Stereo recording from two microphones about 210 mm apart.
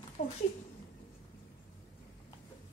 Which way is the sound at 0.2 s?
35° left (ahead or behind).